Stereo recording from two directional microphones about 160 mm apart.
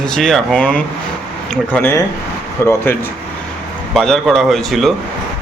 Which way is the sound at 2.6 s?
15° left (ahead or behind).